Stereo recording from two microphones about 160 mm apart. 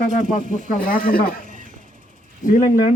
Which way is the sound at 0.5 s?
55° left (ahead or behind).